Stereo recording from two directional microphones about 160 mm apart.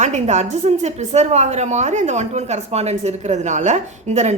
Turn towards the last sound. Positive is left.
turn(degrees=-45)  # may be behind; listen again after turning